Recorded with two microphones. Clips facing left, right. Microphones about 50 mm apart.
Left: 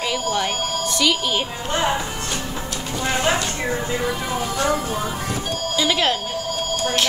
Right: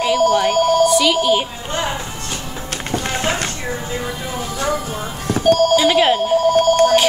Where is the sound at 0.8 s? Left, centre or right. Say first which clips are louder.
Right 7 dB; centre.